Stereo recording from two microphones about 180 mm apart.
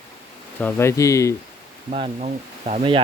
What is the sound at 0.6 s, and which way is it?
Speech, 15° left (ahead or behind).